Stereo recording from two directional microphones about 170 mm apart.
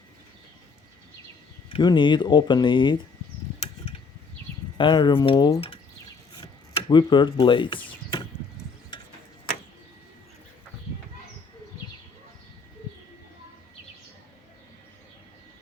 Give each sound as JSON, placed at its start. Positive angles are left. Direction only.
{"t": 1.7, "sound": "speech", "side_deg": 25}
{"t": 4.8, "sound": "speech", "side_deg": 25}
{"t": 6.3, "sound": "a sound", "side_deg": 30}